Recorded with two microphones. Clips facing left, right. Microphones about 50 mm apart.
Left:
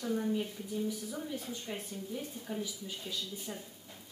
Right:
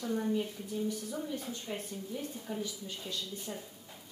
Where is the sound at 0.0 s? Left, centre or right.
Centre.